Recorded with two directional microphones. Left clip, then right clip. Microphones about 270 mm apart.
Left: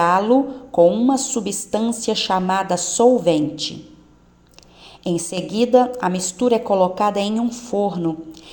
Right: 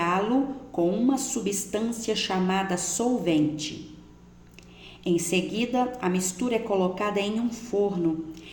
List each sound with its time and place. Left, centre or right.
0.0 s a sound: left
0.8 s a woman's voice: left
5.0 s a woman's voice: left